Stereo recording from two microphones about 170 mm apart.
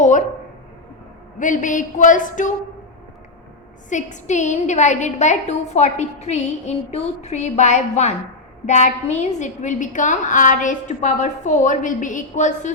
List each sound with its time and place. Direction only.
0.0 s a sound: 50° left (ahead or behind)
1.4 s a woman's voice: 50° left (ahead or behind)
3.8 s a woman's voice: 45° left (ahead or behind)